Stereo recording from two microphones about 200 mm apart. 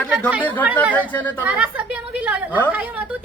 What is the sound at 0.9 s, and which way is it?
Speech, 10° left (ahead or behind).